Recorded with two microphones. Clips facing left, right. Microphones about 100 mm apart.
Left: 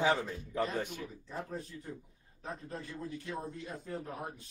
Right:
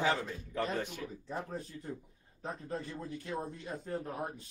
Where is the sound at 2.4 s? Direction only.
25° right (ahead or behind).